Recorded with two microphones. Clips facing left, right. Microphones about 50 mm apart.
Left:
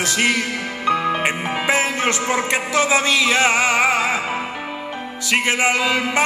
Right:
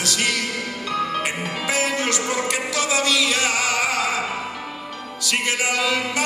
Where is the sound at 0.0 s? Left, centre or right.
Left.